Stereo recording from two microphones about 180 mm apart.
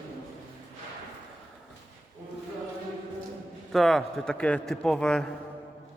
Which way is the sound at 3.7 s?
Centre (ahead or behind).